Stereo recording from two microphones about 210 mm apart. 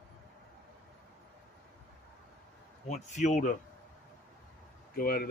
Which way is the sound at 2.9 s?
35° left (ahead or behind).